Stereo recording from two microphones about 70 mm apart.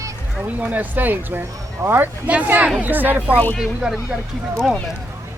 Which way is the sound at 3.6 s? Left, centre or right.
Centre.